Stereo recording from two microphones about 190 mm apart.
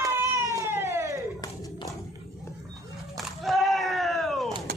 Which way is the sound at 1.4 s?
20° left (ahead or behind).